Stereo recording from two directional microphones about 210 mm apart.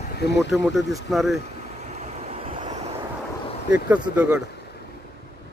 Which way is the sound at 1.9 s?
30° right (ahead or behind).